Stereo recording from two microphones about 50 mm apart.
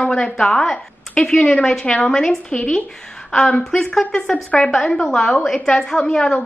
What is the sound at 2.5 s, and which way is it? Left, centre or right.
Speech, left.